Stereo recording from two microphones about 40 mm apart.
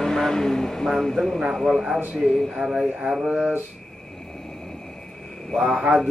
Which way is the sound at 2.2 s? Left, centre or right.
Centre.